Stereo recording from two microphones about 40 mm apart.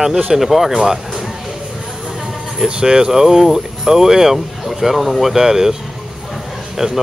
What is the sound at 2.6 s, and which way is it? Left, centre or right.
Speech, right.